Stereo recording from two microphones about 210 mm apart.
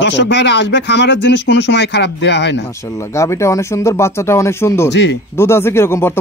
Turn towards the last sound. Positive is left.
turn(degrees=10)  # may be behind; listen again after turning